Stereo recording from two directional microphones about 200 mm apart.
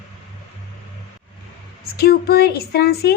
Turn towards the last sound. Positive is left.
turn(degrees=55)  # may be behind; listen again after turning